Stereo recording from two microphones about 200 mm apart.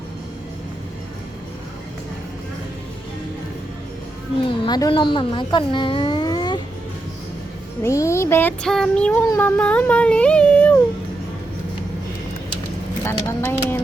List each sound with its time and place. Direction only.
4.4 s speech: 20° left (ahead or behind)
7.8 s a sound: 15° left (ahead or behind)
13.1 s speech: 10° left (ahead or behind)